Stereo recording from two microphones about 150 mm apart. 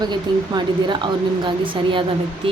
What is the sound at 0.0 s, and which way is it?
Speech, 30° right (ahead or behind).